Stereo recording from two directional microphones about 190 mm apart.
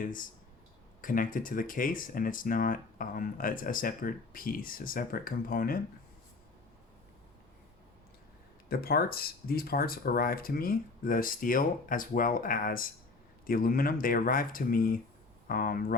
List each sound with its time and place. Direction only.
0.0 s speech: 45° left (ahead or behind)
8.7 s speech: 55° left (ahead or behind)